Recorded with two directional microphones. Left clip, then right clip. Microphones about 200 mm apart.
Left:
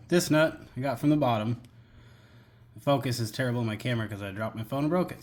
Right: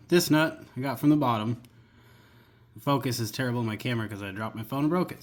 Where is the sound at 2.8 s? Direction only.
15° right (ahead or behind).